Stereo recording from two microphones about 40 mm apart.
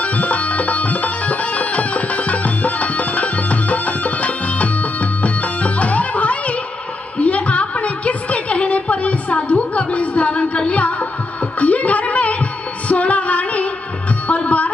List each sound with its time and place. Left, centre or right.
0.0 s music: left
7.2 s a sound: left
12.8 s female singing: left
14.2 s music: left